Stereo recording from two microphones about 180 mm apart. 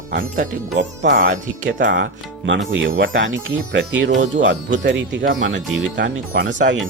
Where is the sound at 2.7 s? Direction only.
90° right.